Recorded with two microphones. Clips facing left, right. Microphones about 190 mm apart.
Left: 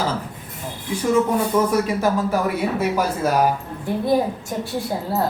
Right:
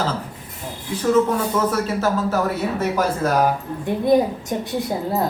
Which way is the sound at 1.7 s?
15° left (ahead or behind).